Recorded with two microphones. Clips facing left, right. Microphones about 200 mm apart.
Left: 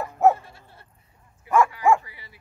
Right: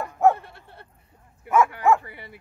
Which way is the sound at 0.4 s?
60° right (ahead or behind).